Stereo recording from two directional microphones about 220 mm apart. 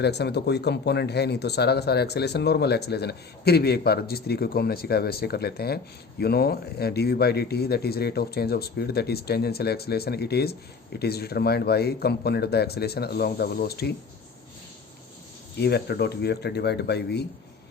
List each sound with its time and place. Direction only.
0.0 s speech: 50° left (ahead or behind)
15.5 s speech: 50° left (ahead or behind)